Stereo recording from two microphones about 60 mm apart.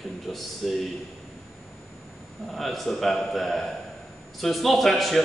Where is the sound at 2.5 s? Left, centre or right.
Centre.